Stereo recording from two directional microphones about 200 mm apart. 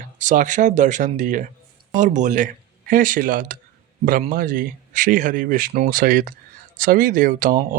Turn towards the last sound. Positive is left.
turn(degrees=-40)  # may be behind; listen again after turning